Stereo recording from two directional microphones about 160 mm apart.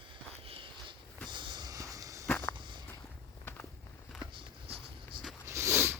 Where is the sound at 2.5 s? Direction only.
30° right (ahead or behind).